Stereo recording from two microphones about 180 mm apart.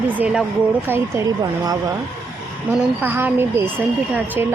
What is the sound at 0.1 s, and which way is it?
A woman's voice, 5° right (ahead or behind).